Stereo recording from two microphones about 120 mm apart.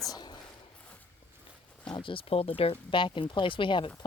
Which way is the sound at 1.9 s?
45° left (ahead or behind).